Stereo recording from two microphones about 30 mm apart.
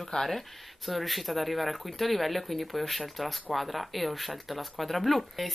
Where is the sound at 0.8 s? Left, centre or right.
Centre.